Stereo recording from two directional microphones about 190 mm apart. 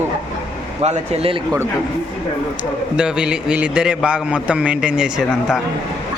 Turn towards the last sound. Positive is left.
turn(degrees=-5)  # may be behind; listen again after turning